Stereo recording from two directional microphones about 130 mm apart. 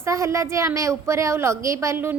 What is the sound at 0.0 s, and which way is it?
A woman's voice, 25° right (ahead or behind).